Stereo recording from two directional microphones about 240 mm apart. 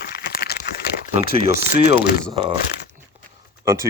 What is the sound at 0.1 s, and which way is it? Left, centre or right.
Crumpling, left.